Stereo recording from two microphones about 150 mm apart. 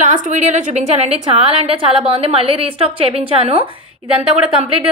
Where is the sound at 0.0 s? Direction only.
55° right (ahead or behind).